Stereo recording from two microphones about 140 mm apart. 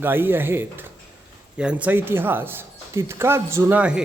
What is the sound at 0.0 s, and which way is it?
Speech, 15° right (ahead or behind).